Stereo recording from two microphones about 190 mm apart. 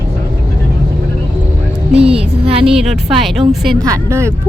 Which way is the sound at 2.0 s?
30° right (ahead or behind).